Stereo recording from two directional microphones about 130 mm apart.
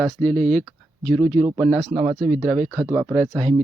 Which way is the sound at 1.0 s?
5° left (ahead or behind).